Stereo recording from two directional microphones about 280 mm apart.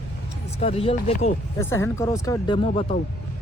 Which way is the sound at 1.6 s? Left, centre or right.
Centre.